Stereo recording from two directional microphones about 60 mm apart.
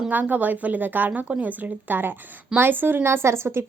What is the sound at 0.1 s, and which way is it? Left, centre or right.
A woman's voice, right.